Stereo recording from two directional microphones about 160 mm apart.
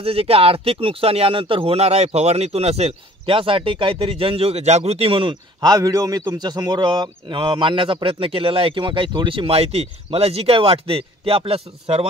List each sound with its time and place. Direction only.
0.0 s speech: 35° right (ahead or behind)